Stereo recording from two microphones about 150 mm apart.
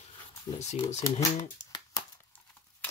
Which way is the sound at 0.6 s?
50° left (ahead or behind).